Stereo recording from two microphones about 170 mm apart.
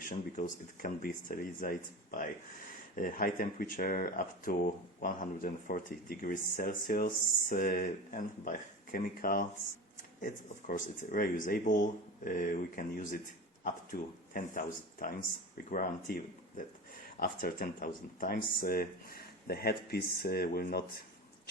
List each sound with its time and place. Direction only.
0.0 s speech: 50° left (ahead or behind)
14.3 s speech: 55° left (ahead or behind)